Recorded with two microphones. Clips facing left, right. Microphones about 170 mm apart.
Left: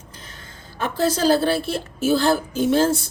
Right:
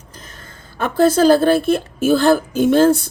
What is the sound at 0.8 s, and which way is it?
A woman's voice, 55° right (ahead or behind).